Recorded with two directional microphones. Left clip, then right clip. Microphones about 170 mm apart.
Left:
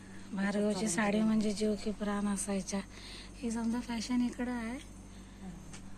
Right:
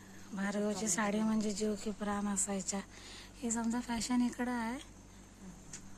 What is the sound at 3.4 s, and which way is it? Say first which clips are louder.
A woman's voice: even; 25° right (ahead or behind).